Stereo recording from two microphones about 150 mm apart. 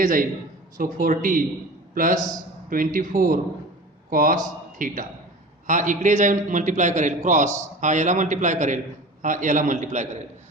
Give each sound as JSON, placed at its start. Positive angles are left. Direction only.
{"t": 0.0, "sound": "a man's voice", "side_deg": -60}
{"t": 2.6, "sound": "a man's voice", "side_deg": -65}